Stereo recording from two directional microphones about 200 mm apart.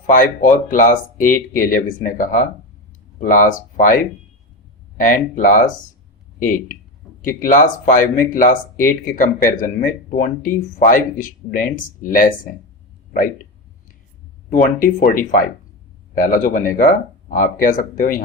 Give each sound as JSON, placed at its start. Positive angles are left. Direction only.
{"t": 0.1, "sound": "speech", "side_deg": 40}
{"t": 14.5, "sound": "speech", "side_deg": 45}